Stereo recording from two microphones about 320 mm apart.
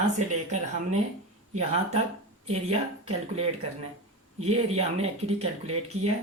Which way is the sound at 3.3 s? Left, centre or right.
Centre.